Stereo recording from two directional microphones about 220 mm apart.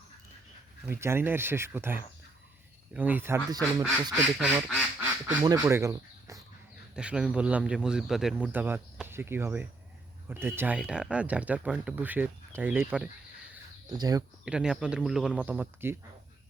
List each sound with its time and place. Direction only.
0.9 s speech: 10° right (ahead or behind)
4.9 s quack: 5° right (ahead or behind)
5.5 s speech: 10° right (ahead or behind)
14.4 s speech: 5° right (ahead or behind)